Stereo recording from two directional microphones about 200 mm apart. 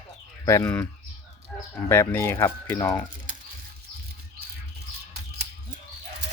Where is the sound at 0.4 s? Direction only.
15° left (ahead or behind).